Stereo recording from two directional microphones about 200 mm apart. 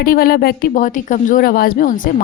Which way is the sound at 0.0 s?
50° left (ahead or behind).